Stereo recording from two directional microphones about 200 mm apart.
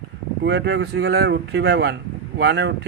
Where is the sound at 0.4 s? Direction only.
60° right (ahead or behind).